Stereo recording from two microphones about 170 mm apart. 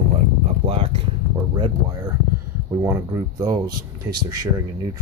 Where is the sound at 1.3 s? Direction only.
25° right (ahead or behind).